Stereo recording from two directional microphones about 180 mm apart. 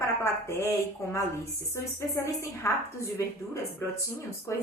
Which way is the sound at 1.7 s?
15° left (ahead or behind).